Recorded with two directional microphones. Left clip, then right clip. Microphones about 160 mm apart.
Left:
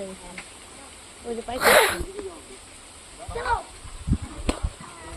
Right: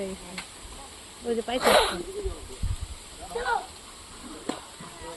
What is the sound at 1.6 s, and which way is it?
Speech, 25° left (ahead or behind).